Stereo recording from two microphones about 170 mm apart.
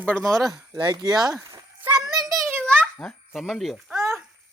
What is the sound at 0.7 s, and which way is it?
Speech, 25° right (ahead or behind).